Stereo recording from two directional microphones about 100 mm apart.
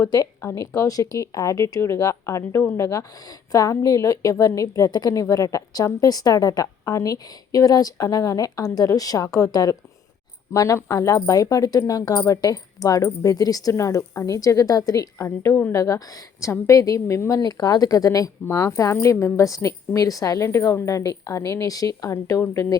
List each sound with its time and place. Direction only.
0.0 s speech: 30° left (ahead or behind)